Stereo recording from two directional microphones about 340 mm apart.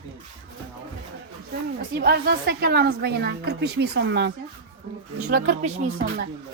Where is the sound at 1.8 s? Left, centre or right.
Right.